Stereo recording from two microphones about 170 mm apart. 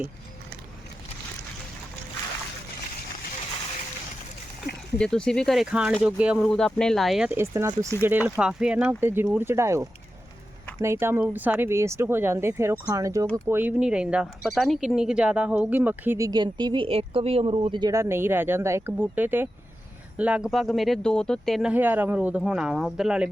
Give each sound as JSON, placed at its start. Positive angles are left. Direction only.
{"t": 4.9, "sound": "speech", "side_deg": 5}
{"t": 7.3, "sound": "speech", "side_deg": -15}
{"t": 8.4, "sound": "speech", "side_deg": -5}
{"t": 21.7, "sound": "speech", "side_deg": -10}